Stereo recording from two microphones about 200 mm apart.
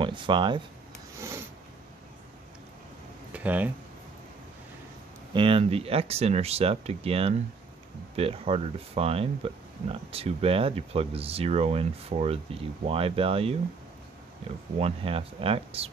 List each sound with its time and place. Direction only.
0.0 s speech: 25° right (ahead or behind)
3.3 s speech: 10° right (ahead or behind)
5.3 s speech: 25° right (ahead or behind)
14.8 s speech: 30° right (ahead or behind)